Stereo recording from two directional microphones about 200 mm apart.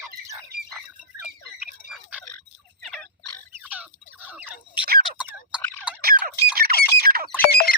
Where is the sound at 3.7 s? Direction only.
10° right (ahead or behind).